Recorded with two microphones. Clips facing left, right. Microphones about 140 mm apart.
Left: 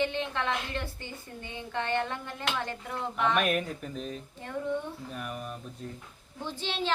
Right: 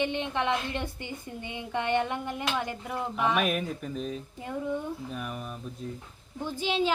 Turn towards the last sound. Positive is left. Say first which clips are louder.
# right 6 dB
turn(degrees=-10)  # may be behind; listen again after turning